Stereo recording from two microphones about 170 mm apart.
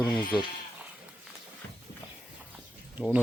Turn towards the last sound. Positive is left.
turn(degrees=-10)  # may be behind; listen again after turning